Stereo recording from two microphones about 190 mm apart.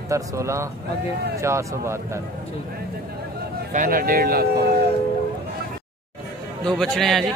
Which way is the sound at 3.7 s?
45° right (ahead or behind).